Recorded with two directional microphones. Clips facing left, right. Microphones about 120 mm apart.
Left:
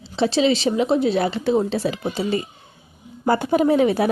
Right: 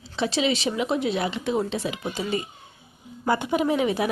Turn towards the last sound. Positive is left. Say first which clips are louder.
# left 6 dB
turn(degrees=40)  # may be behind; listen again after turning